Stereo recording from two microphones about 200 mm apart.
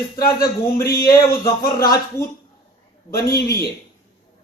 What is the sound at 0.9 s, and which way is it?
Speech, 15° left (ahead or behind).